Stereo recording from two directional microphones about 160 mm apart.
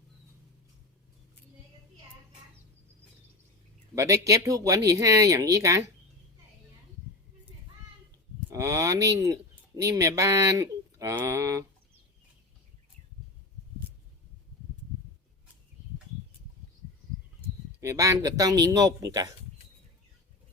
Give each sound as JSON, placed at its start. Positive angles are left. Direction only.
{"t": 3.9, "sound": "speech", "side_deg": -20}
{"t": 8.5, "sound": "speech", "side_deg": -20}
{"t": 17.7, "sound": "speech", "side_deg": -20}